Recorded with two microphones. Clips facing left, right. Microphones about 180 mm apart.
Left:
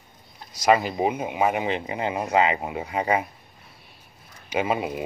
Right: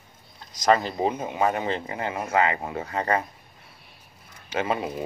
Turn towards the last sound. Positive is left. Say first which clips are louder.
# left 2 dB
turn(degrees=15)  # may be behind; listen again after turning